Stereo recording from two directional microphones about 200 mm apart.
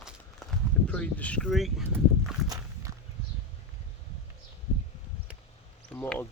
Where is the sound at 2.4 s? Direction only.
15° right (ahead or behind).